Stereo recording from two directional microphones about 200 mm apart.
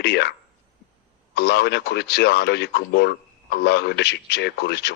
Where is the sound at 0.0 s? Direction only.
55° left (ahead or behind).